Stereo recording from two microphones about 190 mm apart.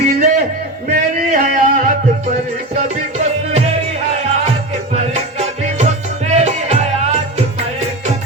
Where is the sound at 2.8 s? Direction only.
35° right (ahead or behind).